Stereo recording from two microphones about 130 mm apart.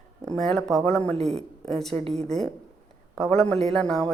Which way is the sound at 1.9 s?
55° right (ahead or behind).